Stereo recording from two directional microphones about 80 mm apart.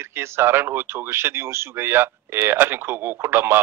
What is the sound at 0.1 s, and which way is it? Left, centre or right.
Speech, right.